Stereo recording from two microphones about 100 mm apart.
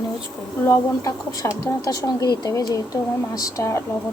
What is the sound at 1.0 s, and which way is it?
Speech, 35° left (ahead or behind).